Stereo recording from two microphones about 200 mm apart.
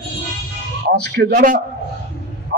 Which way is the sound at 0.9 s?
55° right (ahead or behind).